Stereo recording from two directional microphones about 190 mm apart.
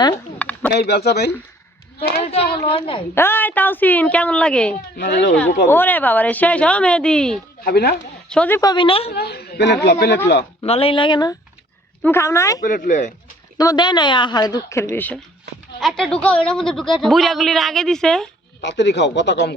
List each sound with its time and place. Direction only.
0.3 s a sound: 10° left (ahead or behind)
0.7 s speech: 60° left (ahead or behind)
2.6 s a woman's voice: 30° left (ahead or behind)
3.2 s speech: 10° left (ahead or behind)
4.9 s speech: 65° left (ahead or behind)
5.3 s speech: 5° left (ahead or behind)
7.6 s speech: 55° left (ahead or behind)
8.3 s speech: 10° left (ahead or behind)
8.7 s a woman's voice: 25° left (ahead or behind)
9.1 s speech: 55° left (ahead or behind)
10.6 s a woman's voice: 30° left (ahead or behind)
12.6 s speech: 45° left (ahead or behind)
13.6 s a woman's voice: 20° left (ahead or behind); by 18.3 s centre (ahead or behind)
18.6 s speech: 65° left (ahead or behind)